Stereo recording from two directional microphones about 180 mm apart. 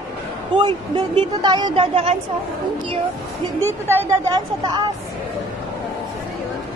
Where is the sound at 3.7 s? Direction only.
15° right (ahead or behind).